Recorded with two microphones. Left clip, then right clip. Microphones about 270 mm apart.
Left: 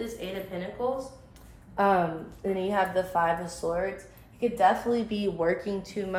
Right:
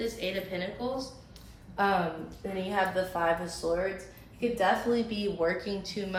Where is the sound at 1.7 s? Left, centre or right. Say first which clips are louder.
Left 4 dB; left.